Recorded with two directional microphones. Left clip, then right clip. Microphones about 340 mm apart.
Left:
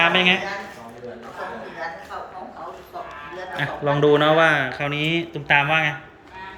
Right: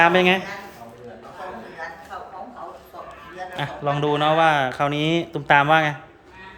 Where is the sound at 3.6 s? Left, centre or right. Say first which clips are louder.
Left 4 dB; centre.